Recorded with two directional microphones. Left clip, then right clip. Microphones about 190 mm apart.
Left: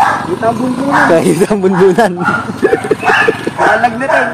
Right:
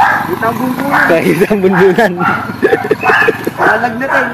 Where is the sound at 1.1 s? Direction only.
20° left (ahead or behind).